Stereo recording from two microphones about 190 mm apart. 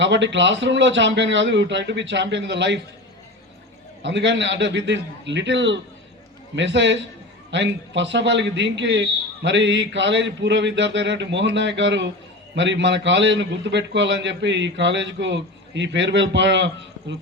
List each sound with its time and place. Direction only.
0.0 s a man's voice: 70° right (ahead or behind)
4.0 s a man's voice: 70° right (ahead or behind)